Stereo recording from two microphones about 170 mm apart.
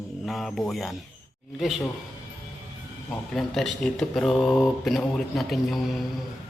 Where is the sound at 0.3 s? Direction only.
Centre (ahead or behind).